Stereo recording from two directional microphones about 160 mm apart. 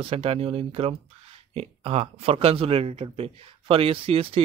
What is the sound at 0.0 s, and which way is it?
Speech, 35° right (ahead or behind).